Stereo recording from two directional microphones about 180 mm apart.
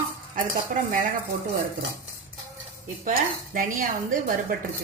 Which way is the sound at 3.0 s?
45° right (ahead or behind).